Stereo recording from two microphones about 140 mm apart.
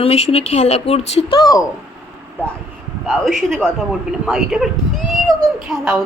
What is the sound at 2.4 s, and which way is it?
Speech, 15° right (ahead or behind).